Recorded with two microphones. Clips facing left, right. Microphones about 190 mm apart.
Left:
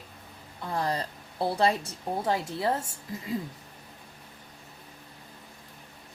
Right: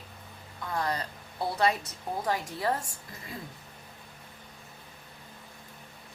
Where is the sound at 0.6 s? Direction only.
30° left (ahead or behind).